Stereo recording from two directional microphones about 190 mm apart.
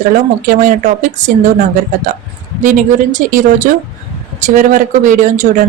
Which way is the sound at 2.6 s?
45° right (ahead or behind).